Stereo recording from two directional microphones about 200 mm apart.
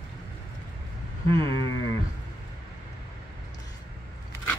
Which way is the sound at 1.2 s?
25° right (ahead or behind).